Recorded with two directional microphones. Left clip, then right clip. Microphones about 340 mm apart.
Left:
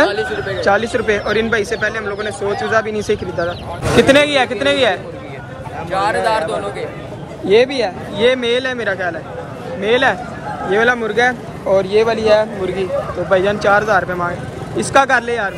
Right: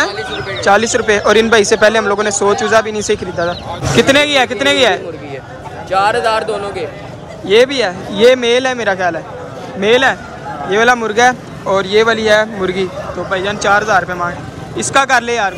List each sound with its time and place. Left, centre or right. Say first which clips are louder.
0.6 s speech: right 5 dB; centre
5.9 s speech: right 4 dB; centre
7.4 s speech: right 2 dB; centre